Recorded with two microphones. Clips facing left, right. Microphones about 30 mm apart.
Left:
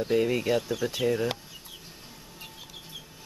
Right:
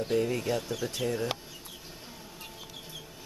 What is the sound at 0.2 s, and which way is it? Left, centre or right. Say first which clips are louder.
Speech: left 4 dB; left.